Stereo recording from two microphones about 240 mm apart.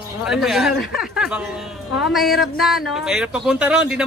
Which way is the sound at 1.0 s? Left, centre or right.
Centre.